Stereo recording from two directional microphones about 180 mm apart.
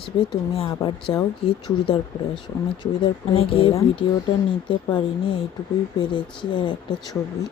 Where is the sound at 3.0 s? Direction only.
30° left (ahead or behind).